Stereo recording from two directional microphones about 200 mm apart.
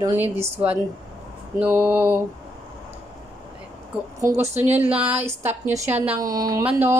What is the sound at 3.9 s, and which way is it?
Speech, 5° right (ahead or behind).